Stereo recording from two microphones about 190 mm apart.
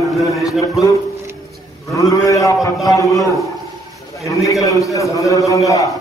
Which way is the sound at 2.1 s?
15° left (ahead or behind).